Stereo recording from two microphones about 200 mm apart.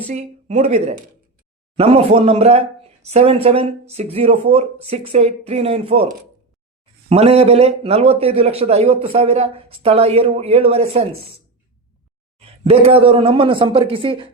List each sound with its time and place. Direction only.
0.1 s speech: 35° right (ahead or behind)
7.1 s speech: 30° right (ahead or behind)
12.4 s speech: 30° right (ahead or behind)